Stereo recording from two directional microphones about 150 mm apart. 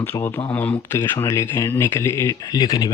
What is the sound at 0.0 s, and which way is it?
Speech, 15° left (ahead or behind).